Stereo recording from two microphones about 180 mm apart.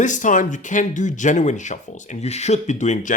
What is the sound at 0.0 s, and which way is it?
Speech, 45° left (ahead or behind).